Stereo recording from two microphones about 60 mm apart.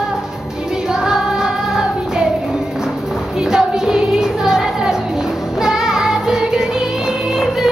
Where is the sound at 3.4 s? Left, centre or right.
Centre.